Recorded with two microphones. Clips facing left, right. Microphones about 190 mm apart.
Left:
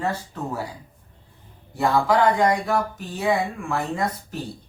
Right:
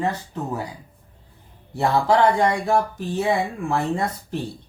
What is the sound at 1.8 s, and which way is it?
Speech, 30° right (ahead or behind).